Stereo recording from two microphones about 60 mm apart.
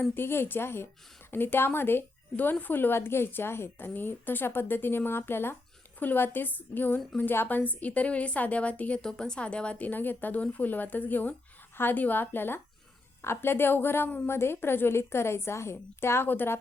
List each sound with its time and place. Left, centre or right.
0.0 s a woman's voice: left